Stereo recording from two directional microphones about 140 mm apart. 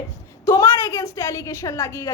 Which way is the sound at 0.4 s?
20° left (ahead or behind).